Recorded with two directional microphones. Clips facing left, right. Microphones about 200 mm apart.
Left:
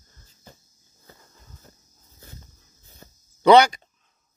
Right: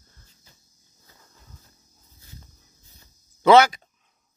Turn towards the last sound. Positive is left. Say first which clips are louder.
# left 1 dB
turn(degrees=-5)  # may be behind; listen again after turning